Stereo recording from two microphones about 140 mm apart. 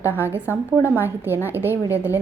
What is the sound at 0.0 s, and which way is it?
A woman's voice, 15° right (ahead or behind).